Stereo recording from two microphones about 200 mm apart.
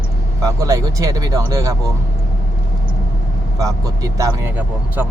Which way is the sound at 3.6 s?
15° right (ahead or behind).